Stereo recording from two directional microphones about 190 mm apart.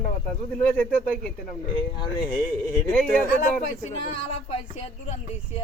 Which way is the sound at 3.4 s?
35° left (ahead or behind).